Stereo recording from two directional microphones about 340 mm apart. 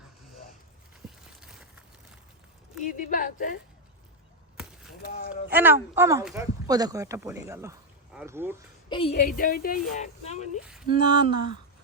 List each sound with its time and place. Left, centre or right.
1.4 s a sound: centre
2.8 s a woman's voice: left
5.0 s a woman's voice: left
5.5 s speech: centre
8.9 s a woman's voice: centre
10.9 s speech: centre